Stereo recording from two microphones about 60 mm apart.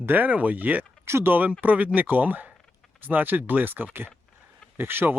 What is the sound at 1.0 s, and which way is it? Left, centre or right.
Speech, right.